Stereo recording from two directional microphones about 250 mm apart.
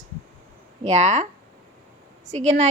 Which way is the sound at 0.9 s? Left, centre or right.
Right.